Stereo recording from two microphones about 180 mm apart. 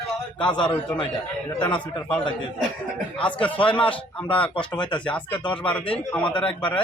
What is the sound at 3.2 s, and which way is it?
Speech, 5° left (ahead or behind).